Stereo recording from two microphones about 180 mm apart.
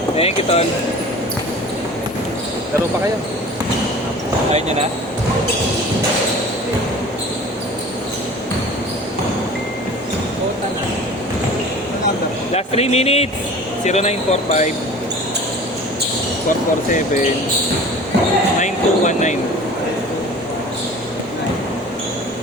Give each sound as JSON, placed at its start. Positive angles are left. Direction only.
{"t": 0.2, "sound": "speech", "side_deg": 35}
{"t": 4.5, "sound": "speech", "side_deg": -35}
{"t": 12.5, "sound": "speech", "side_deg": 35}
{"t": 18.6, "sound": "speech", "side_deg": 40}